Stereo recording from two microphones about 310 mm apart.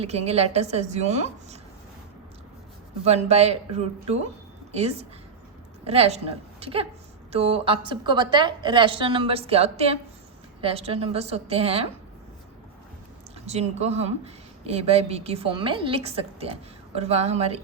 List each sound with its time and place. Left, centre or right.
0.0 s a woman's voice: centre
3.0 s a woman's voice: right
13.4 s a woman's voice: right